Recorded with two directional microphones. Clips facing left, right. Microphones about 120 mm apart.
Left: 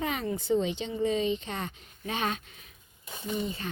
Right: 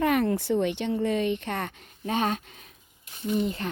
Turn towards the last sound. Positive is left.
turn(degrees=-60)  # may be behind; listen again after turning